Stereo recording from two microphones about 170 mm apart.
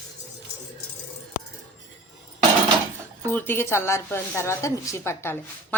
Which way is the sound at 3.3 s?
10° left (ahead or behind).